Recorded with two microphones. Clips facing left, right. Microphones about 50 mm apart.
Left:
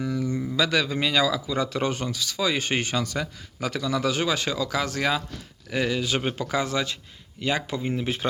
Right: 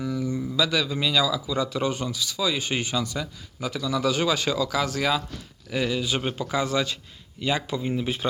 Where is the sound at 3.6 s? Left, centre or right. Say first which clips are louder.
Left 2 dB; left.